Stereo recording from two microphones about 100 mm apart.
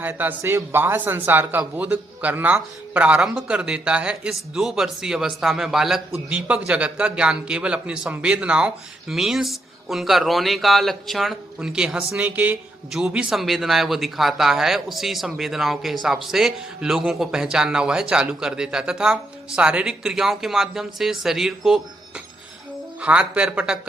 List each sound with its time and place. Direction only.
0.0 s speech: 20° right (ahead or behind)
12.9 s a man's voice: 5° right (ahead or behind)
23.0 s speech: 15° right (ahead or behind)